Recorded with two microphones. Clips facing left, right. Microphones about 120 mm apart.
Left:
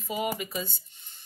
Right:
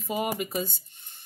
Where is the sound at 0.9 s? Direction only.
55° right (ahead or behind).